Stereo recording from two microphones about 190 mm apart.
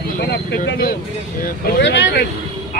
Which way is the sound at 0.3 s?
55° left (ahead or behind).